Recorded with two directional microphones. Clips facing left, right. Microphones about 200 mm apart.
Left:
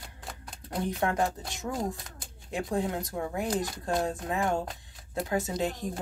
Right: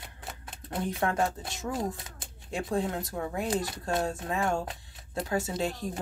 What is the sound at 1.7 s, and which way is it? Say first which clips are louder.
Speech: even; centre (ahead or behind).